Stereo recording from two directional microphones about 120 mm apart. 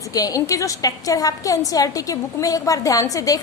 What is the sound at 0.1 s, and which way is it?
A woman's voice, 30° left (ahead or behind).